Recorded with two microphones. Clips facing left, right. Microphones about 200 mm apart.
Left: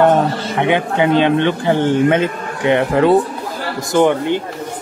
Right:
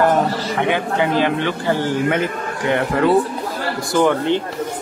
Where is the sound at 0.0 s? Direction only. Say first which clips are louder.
Left 3 dB; 25° left (ahead or behind).